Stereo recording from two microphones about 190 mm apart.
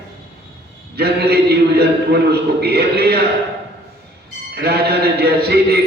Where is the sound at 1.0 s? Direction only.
55° right (ahead or behind).